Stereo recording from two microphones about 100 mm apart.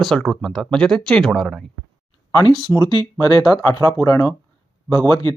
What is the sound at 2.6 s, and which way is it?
Speech, 45° left (ahead or behind).